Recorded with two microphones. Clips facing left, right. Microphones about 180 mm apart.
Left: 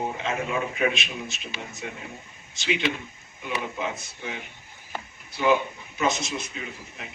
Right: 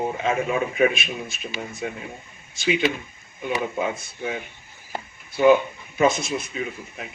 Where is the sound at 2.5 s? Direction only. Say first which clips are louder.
Right 5 dB; 50° right (ahead or behind).